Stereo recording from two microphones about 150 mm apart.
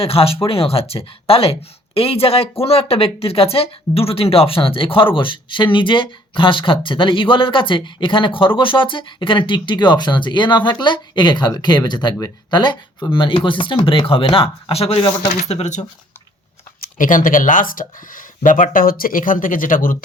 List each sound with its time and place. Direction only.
0.0 s speech: 40° left (ahead or behind)
15.4 s speech: 50° left (ahead or behind)
16.8 s speech: 65° left (ahead or behind)